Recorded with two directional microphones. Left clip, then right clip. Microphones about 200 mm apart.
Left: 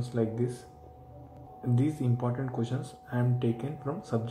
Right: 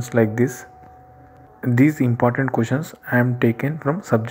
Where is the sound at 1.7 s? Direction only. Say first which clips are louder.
Right 14 dB; 30° right (ahead or behind).